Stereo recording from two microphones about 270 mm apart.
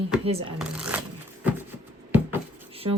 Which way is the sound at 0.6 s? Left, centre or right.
Centre.